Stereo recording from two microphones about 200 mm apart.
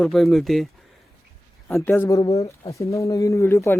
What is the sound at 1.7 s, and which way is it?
Speech, 10° left (ahead or behind).